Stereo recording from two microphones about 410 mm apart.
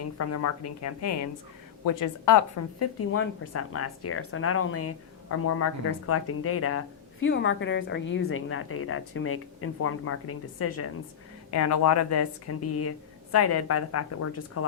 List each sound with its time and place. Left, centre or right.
0.2 s speech: left